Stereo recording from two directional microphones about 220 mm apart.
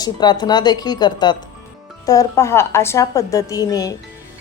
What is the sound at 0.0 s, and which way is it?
A woman's voice, 20° left (ahead or behind).